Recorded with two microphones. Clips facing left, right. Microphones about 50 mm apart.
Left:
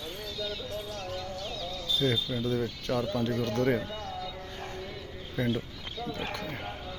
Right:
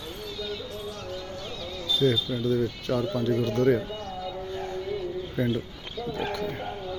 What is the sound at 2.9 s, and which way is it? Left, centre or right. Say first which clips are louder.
Speech: right 2 dB; right.